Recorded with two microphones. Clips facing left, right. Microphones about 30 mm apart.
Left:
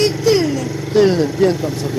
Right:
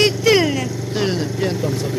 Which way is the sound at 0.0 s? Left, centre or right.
Right.